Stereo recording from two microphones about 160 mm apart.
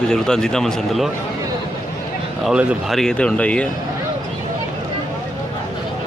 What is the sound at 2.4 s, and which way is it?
Speech, 5° right (ahead or behind).